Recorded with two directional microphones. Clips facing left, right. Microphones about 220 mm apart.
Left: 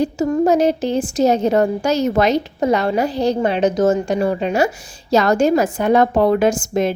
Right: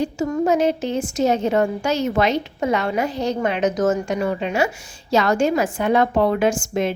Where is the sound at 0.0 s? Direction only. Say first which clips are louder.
Left 4 dB; 35° left (ahead or behind).